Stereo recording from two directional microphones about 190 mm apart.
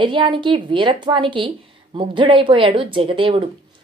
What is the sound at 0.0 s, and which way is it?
A woman's voice, 25° right (ahead or behind).